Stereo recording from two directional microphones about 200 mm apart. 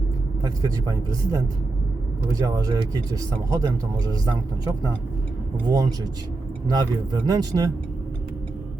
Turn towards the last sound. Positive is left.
turn(degrees=-20)  # may be behind; listen again after turning